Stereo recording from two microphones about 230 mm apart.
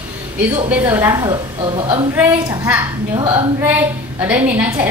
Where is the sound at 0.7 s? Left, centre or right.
Centre.